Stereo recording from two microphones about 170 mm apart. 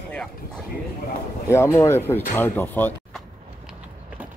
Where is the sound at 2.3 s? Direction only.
10° left (ahead or behind); by 4.3 s 5° right (ahead or behind).